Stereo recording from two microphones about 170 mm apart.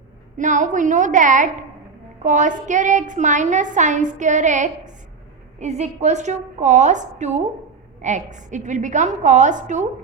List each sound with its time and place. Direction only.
0.3 s a woman's voice: 45° right (ahead or behind)